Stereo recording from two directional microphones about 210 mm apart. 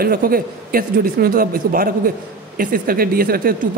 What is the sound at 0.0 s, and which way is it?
A woman's voice, 45° right (ahead or behind).